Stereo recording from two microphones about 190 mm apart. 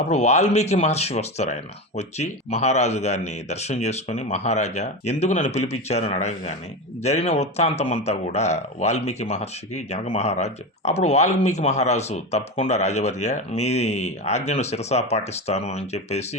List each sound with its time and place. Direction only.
0.1 s speech: 35° left (ahead or behind)